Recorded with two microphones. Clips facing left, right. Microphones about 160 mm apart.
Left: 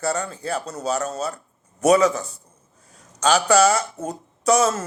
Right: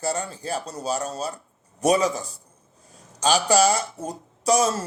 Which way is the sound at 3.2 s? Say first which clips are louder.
Left 2 dB; 30° right (ahead or behind).